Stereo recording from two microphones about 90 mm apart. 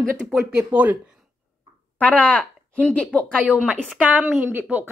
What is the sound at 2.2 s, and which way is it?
Speech, 15° left (ahead or behind).